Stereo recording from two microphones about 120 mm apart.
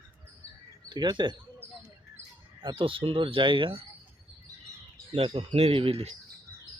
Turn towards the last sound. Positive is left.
turn(degrees=-60)  # may be behind; listen again after turning